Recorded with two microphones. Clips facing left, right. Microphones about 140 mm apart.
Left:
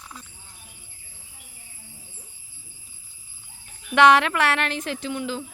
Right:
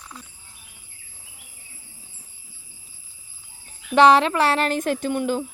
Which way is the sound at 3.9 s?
30° right (ahead or behind).